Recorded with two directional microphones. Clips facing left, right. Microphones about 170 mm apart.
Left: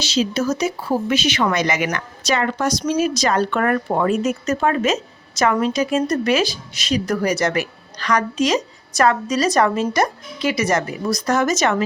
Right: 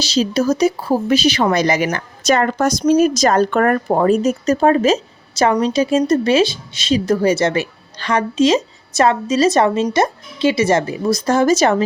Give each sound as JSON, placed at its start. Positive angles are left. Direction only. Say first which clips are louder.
{"t": 0.0, "sound": "speech", "louder": "right 3 dB", "side_deg": -35}